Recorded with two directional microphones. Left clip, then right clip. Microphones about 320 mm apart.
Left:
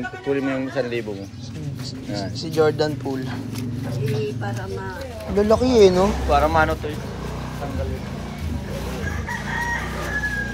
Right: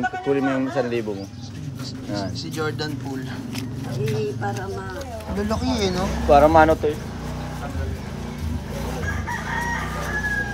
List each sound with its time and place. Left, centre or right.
0.3 s speech: right
2.5 s speech: centre
5.4 s speech: centre
6.2 s speech: right